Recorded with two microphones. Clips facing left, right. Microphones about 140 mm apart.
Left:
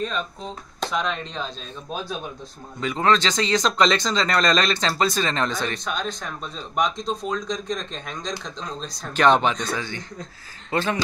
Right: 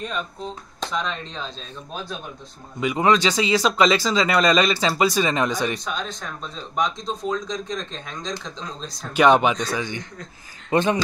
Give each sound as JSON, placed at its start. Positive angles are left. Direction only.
{"t": 0.7, "sound": "speech", "side_deg": 5}
{"t": 2.8, "sound": "speech", "side_deg": -10}
{"t": 6.8, "sound": "speech", "side_deg": 0}
{"t": 8.8, "sound": "speech", "side_deg": -10}